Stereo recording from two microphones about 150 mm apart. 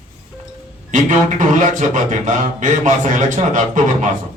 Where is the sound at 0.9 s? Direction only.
55° right (ahead or behind).